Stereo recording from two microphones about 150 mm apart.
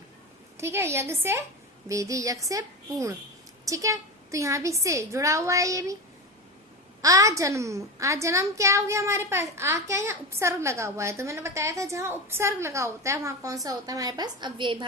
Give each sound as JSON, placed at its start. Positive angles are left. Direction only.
{"t": 0.5, "sound": "a woman's voice", "side_deg": -15}
{"t": 7.0, "sound": "a woman's voice", "side_deg": -20}